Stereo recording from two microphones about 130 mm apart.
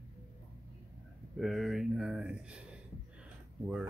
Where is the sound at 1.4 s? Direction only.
Centre (ahead or behind).